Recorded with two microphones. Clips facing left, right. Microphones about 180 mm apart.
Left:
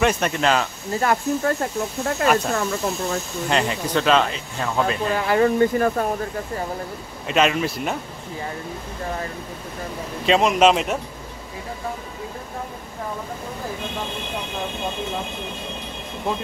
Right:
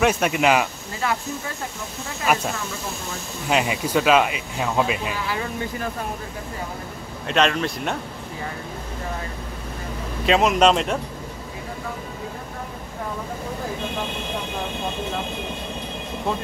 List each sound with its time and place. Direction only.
0.0 s speech: 5° right (ahead or behind)
1.0 s speech: 55° left (ahead or behind)
3.4 s speech: 5° right (ahead or behind)
5.1 s speech: 55° left (ahead or behind)
7.2 s a man's voice: 5° left (ahead or behind)
10.2 s a man's voice: centre (ahead or behind)